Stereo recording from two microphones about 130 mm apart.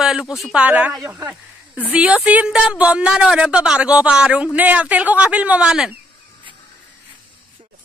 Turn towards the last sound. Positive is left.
turn(degrees=-5)  # may be behind; listen again after turning